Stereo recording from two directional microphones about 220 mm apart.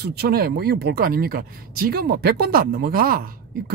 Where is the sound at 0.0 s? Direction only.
45° right (ahead or behind).